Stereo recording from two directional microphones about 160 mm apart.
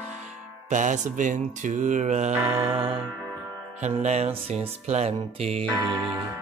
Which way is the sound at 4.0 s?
45° right (ahead or behind).